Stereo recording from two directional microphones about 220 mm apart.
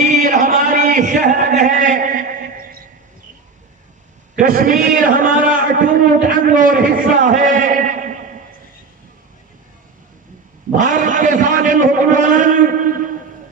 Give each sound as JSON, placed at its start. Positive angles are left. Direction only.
{"t": 0.0, "sound": "a sound", "side_deg": -35}
{"t": 4.4, "sound": "a man's voice", "side_deg": -40}
{"t": 10.7, "sound": "a man's voice", "side_deg": -35}